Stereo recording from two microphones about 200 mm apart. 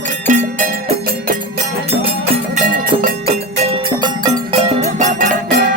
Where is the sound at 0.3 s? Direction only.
40° right (ahead or behind).